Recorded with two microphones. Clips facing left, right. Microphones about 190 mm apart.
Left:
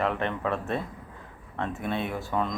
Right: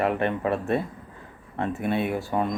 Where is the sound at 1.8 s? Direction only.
10° right (ahead or behind).